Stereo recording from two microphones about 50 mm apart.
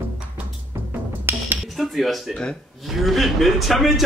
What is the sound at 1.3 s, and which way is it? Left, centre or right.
Music, right.